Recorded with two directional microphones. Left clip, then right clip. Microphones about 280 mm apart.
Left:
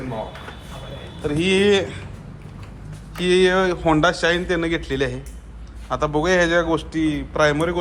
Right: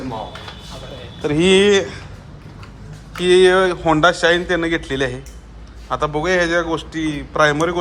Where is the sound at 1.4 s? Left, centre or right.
Centre.